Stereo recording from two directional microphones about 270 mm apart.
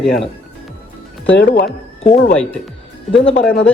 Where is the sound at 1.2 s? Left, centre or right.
Left.